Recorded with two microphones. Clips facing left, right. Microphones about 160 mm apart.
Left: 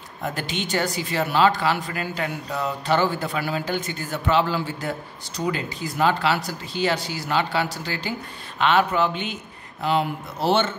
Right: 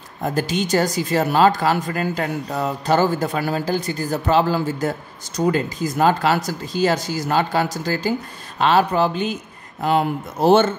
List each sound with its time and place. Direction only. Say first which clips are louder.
0.2 s a man's voice: right 7 dB; 40° right (ahead or behind)